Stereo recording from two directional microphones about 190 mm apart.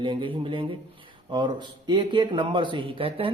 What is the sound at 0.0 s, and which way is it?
A man's voice, 25° right (ahead or behind).